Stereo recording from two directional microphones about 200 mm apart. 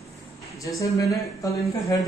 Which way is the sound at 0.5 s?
15° left (ahead or behind).